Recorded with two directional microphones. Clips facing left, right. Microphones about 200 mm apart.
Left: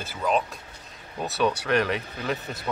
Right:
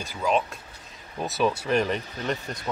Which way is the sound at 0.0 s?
Centre (ahead or behind).